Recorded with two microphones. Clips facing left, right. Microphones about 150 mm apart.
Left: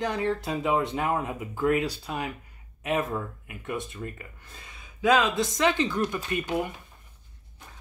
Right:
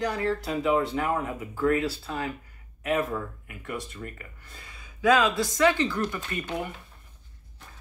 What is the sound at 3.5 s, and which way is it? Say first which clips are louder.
Speech: left 2 dB; 20° left (ahead or behind).